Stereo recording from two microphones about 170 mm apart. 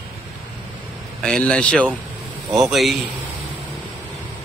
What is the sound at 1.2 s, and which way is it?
A man's voice, 5° left (ahead or behind).